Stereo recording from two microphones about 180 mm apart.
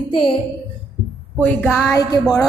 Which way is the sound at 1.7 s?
10° left (ahead or behind).